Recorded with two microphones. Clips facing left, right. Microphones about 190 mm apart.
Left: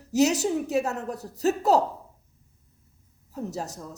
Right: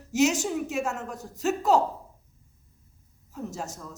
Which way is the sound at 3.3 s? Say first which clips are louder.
Left 3 dB; 40° left (ahead or behind).